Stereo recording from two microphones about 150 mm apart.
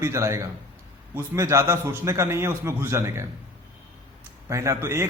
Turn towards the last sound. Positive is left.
turn(degrees=-20)  # may be behind; listen again after turning